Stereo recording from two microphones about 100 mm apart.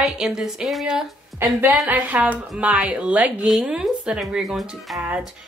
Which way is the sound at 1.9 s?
15° right (ahead or behind).